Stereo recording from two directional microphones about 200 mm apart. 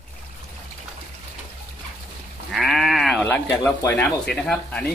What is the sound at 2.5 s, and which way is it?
Speech, centre (ahead or behind).